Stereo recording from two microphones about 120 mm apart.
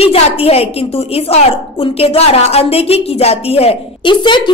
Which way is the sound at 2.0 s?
55° left (ahead or behind).